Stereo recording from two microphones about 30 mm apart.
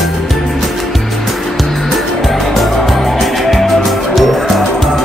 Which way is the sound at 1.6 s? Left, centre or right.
Centre.